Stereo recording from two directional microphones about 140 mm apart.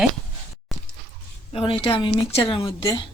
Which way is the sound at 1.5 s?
40° left (ahead or behind).